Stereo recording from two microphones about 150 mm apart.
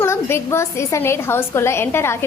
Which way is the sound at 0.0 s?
15° left (ahead or behind).